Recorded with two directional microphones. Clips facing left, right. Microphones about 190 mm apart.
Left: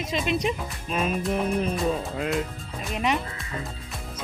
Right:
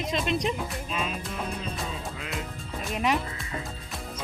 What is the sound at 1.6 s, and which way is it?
Speech, 60° left (ahead or behind).